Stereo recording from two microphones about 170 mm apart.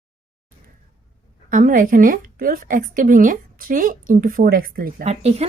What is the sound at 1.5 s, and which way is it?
A woman's voice, 55° right (ahead or behind).